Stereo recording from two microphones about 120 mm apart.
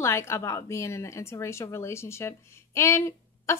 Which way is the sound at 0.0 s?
25° left (ahead or behind).